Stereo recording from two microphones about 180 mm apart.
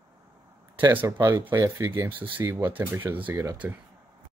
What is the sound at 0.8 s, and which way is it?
Speech, 15° right (ahead or behind).